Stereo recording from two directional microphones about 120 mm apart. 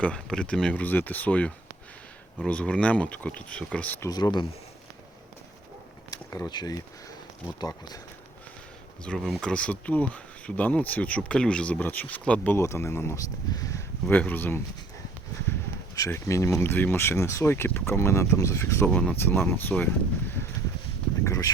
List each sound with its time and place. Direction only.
0.0 s speech: 10° left (ahead or behind)
4.1 s speech: 40° left (ahead or behind)
6.1 s speech: 30° left (ahead or behind)
9.0 s speech: centre (ahead or behind)
12.5 s speech: 20° left (ahead or behind)
14.1 s speech: 15° left (ahead or behind)
16.0 s speech: 20° left (ahead or behind)
21.2 s speech: 25° left (ahead or behind)